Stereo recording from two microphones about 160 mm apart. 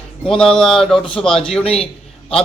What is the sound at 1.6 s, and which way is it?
Speech, 40° left (ahead or behind).